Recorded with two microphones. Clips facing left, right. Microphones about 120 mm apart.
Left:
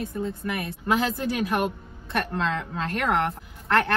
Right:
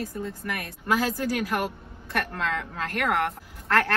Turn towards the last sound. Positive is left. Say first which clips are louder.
# left 1 dB
turn(degrees=20)  # may be behind; listen again after turning